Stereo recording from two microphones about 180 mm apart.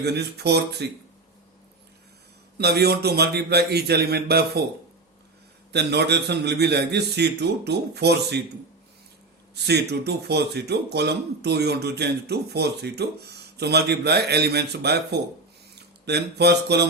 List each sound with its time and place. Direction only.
0.0 s a man's voice: 65° right (ahead or behind)
2.6 s a man's voice: 65° right (ahead or behind)
5.7 s a man's voice: 65° right (ahead or behind)
9.6 s a man's voice: 65° right (ahead or behind)